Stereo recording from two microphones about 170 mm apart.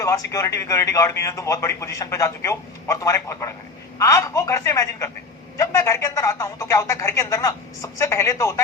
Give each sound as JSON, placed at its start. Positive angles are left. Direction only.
{"t": 0.0, "sound": "speech", "side_deg": 20}